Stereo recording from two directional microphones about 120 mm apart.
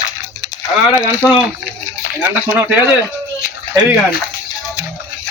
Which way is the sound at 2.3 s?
15° right (ahead or behind).